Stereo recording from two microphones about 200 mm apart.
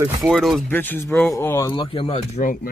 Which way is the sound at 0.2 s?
Centre (ahead or behind).